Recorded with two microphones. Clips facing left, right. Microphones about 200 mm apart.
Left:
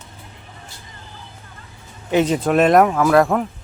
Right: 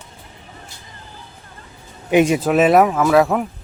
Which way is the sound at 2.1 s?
10° right (ahead or behind).